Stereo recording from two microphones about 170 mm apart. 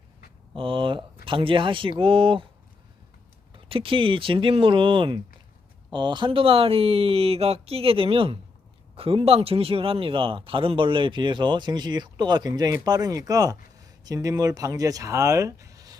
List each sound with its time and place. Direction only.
0.5 s speech: 30° right (ahead or behind)
3.7 s speech: 30° right (ahead or behind)